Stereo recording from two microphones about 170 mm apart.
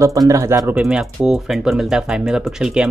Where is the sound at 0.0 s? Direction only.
20° right (ahead or behind).